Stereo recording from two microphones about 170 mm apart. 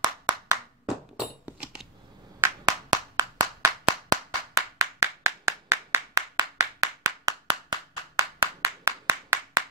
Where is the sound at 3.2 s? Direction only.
20° right (ahead or behind).